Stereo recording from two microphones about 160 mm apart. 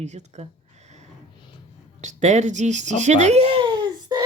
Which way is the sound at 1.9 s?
45° right (ahead or behind).